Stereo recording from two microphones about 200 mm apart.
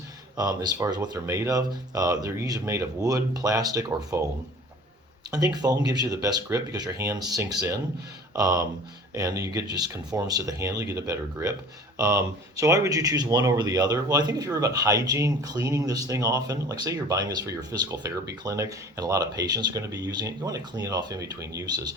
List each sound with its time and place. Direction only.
0.3 s speech: 20° right (ahead or behind)
5.3 s speech: 20° right (ahead or behind)